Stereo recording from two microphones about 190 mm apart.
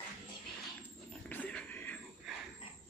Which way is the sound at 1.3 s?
10° left (ahead or behind).